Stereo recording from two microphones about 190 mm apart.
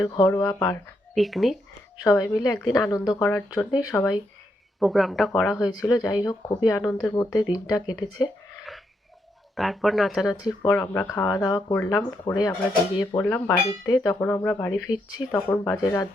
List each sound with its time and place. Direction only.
0.0 s speech: 20° left (ahead or behind)
1.1 s speech: centre (ahead or behind)
2.0 s speech: 15° left (ahead or behind)
4.8 s speech: centre (ahead or behind)
5.8 s speech: 20° left (ahead or behind)
9.6 s speech: centre (ahead or behind)
10.4 s speech: 15° left (ahead or behind)
13.1 s speech: 10° left (ahead or behind)